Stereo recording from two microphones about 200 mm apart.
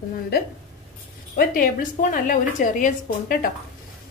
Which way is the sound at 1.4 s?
45° left (ahead or behind).